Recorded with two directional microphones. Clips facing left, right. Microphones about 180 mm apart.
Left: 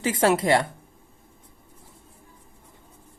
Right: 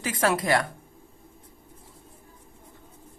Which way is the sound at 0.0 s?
25° left (ahead or behind).